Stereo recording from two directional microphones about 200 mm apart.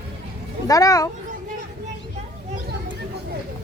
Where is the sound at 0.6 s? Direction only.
15° left (ahead or behind).